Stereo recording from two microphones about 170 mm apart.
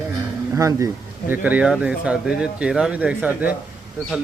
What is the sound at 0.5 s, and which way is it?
Speech, 20° right (ahead or behind).